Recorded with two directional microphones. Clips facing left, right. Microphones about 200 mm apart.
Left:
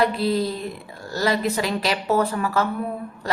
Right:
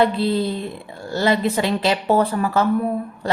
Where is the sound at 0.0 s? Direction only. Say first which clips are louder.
Right 2 dB; 25° right (ahead or behind).